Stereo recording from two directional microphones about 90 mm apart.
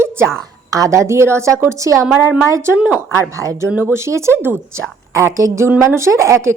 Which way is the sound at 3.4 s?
35° right (ahead or behind).